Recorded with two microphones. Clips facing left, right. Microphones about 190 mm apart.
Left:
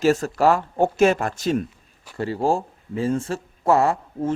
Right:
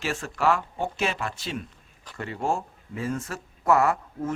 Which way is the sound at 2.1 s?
35° left (ahead or behind).